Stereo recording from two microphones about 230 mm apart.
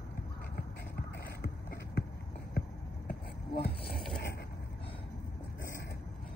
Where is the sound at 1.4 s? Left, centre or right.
Left.